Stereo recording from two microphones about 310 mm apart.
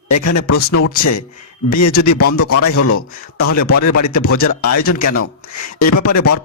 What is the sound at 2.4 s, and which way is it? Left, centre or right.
Speech, left.